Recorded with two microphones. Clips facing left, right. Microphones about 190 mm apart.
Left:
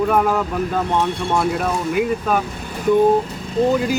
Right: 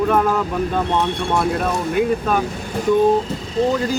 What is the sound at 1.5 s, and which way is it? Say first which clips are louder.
Speech: right 1 dB; 5° left (ahead or behind).